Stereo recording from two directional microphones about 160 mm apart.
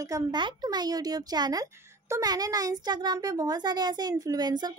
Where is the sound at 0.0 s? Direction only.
25° right (ahead or behind).